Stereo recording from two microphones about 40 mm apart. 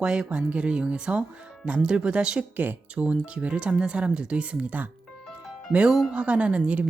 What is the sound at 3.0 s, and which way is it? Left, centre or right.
Speech, right.